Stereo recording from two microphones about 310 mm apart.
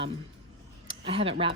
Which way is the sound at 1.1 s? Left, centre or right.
Centre.